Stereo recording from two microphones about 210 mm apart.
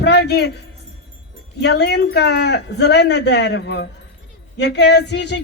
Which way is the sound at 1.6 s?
50° left (ahead or behind).